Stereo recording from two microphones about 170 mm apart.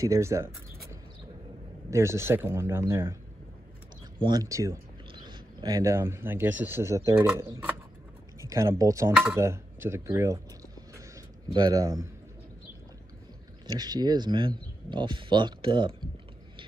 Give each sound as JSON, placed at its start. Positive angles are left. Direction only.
{"t": 0.0, "sound": "speech", "side_deg": -15}
{"t": 1.9, "sound": "speech", "side_deg": -15}
{"t": 4.2, "sound": "speech", "side_deg": -25}
{"t": 8.4, "sound": "speech", "side_deg": -20}
{"t": 9.1, "sound": "speech", "side_deg": -5}
{"t": 9.4, "sound": "a sound", "side_deg": -15}
{"t": 13.7, "sound": "speech", "side_deg": -25}